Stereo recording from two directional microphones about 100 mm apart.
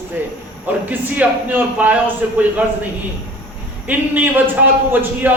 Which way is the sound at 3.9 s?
15° right (ahead or behind).